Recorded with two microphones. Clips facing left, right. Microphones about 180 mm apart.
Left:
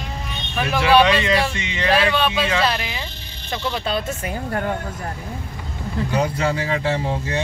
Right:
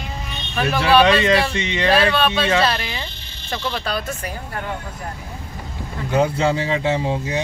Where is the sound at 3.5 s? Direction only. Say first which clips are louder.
Left 1 dB; 20° left (ahead or behind).